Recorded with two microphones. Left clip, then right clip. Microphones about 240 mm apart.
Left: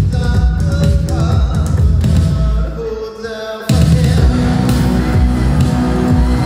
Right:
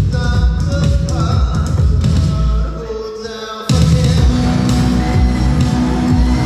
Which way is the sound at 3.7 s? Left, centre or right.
Left.